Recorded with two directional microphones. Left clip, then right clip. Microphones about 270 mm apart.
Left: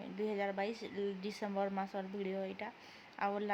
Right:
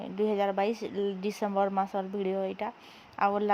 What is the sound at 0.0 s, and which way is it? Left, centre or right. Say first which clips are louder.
Speech: right 10 dB; centre.